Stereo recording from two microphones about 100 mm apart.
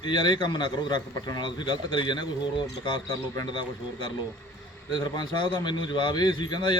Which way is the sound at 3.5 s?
55° left (ahead or behind).